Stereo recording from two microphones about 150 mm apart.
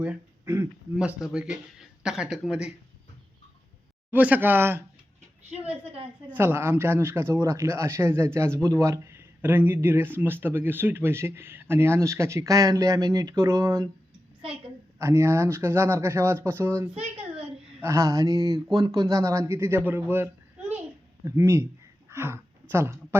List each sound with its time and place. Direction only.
0.0 s a sound: 10° right (ahead or behind)
0.9 s speech: 5° right (ahead or behind)
4.1 s speech: 10° right (ahead or behind)
5.8 s a woman's voice: 40° right (ahead or behind)
6.3 s speech: 15° right (ahead or behind)
14.9 s speech: 15° right (ahead or behind)